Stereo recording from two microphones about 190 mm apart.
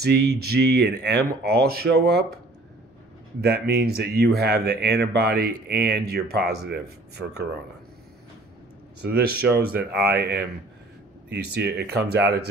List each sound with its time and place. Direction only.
0.0 s speech: 55° right (ahead or behind)
9.0 s speech: 55° right (ahead or behind)